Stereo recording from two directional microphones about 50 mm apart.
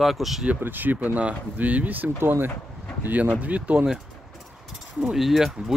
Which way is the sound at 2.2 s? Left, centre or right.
Right.